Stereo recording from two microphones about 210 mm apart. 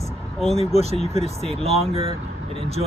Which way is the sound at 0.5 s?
30° right (ahead or behind).